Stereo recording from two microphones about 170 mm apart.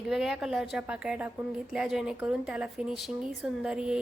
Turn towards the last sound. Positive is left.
turn(degrees=-5)  # may be behind; listen again after turning